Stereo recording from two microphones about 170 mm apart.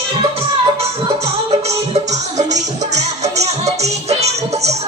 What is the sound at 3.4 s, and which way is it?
Music, 40° right (ahead or behind).